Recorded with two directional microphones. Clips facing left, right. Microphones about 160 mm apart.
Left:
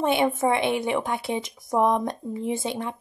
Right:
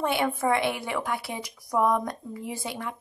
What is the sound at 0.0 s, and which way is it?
A woman's voice, 20° left (ahead or behind).